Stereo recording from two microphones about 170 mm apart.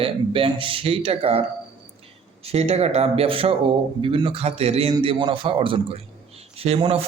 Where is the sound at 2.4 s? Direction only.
40° right (ahead or behind).